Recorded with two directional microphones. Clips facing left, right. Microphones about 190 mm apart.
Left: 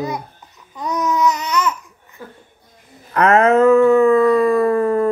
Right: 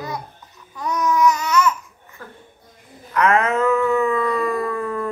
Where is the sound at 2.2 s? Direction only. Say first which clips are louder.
Left 3 dB; 15° left (ahead or behind).